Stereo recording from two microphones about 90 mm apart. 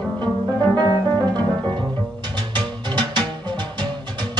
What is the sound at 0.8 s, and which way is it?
Music, 50° right (ahead or behind).